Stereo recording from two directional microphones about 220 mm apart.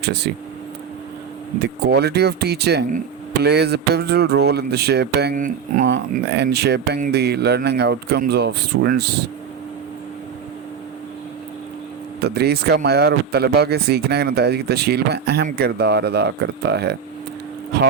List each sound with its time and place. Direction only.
0.0 s speech: 50° right (ahead or behind)
1.5 s speech: 50° right (ahead or behind)
5.8 s speech: 50° right (ahead or behind)
12.2 s speech: 45° right (ahead or behind)